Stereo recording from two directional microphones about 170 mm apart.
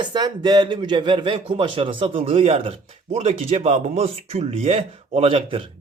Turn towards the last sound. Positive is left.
turn(degrees=-35)  # may be behind; listen again after turning